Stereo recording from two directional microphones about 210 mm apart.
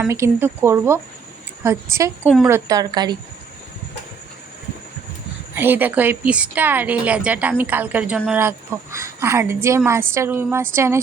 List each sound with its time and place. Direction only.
0.0 s a woman's voice: 10° right (ahead or behind)
2.2 s speech: centre (ahead or behind)
2.5 s a woman's voice: 15° right (ahead or behind)
5.5 s a woman's voice: 10° right (ahead or behind)